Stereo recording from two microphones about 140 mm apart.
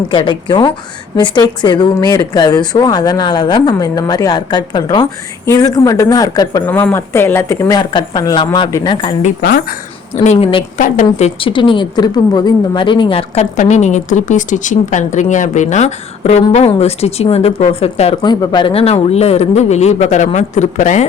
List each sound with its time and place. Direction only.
0.1 s speech: 35° left (ahead or behind)
6.7 s speech: 15° left (ahead or behind)
7.8 s speech: 30° left (ahead or behind)
9.2 s speech: 90° left
10.1 s speech: 40° left (ahead or behind)
10.8 s a woman's voice: 65° left (ahead or behind)
11.3 s a woman's voice: 35° left (ahead or behind)
18.2 s a woman's voice: 35° left (ahead or behind); by 21.0 s 60° left (ahead or behind)